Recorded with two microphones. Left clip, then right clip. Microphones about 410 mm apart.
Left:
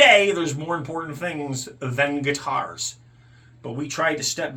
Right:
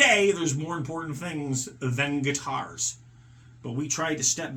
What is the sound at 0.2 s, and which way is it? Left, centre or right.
Speech, centre.